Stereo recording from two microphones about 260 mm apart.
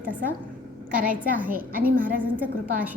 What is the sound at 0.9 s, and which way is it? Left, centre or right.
Speech, right.